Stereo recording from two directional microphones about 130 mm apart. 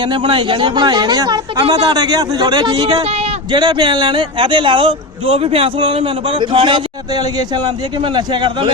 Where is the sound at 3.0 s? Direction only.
55° right (ahead or behind).